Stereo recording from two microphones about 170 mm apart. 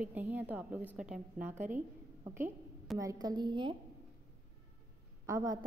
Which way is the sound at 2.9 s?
20° right (ahead or behind).